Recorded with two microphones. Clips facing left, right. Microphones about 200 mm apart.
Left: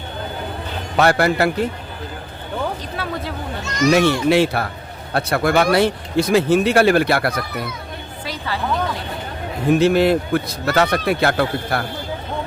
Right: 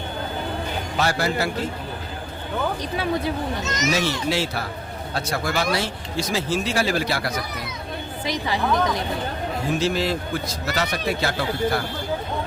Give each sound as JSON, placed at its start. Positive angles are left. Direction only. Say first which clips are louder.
{"t": 0.9, "sound": "speech", "louder": "left 8 dB", "side_deg": 60}
{"t": 2.9, "sound": "speech", "louder": "right 3 dB", "side_deg": -15}
{"t": 3.9, "sound": "speech", "louder": "left 11 dB", "side_deg": 60}
{"t": 8.2, "sound": "speech", "louder": "right 1 dB", "side_deg": -15}
{"t": 9.6, "sound": "speech", "louder": "left 9 dB", "side_deg": 60}